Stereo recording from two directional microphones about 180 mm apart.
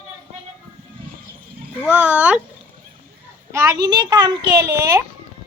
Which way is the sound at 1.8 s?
10° right (ahead or behind).